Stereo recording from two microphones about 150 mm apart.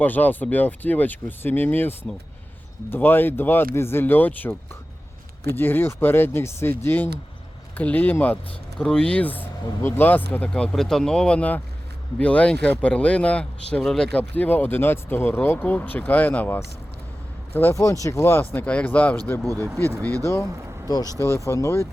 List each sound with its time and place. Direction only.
0.0 s speech: 10° left (ahead or behind)
5.5 s speech: 15° left (ahead or behind)
20.8 s speech: 25° left (ahead or behind)